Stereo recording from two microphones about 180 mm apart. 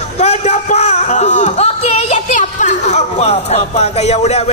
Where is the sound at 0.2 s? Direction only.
40° left (ahead or behind).